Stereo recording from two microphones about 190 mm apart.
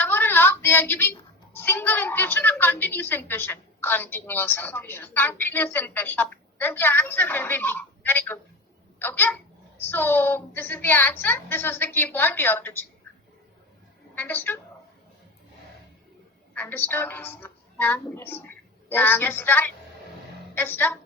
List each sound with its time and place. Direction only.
0.0 s a sound: 10° left (ahead or behind)
1.5 s a woman's voice: 10° left (ahead or behind)
14.2 s a woman's voice: 10° left (ahead or behind)
16.6 s a woman's voice: 10° left (ahead or behind)